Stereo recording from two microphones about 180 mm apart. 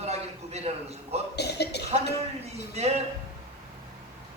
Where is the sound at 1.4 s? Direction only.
65° left (ahead or behind).